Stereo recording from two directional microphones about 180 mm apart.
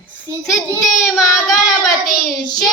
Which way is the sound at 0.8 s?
Centre (ahead or behind).